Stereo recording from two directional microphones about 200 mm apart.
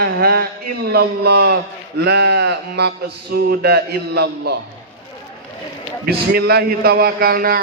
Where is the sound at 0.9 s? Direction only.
55° right (ahead or behind).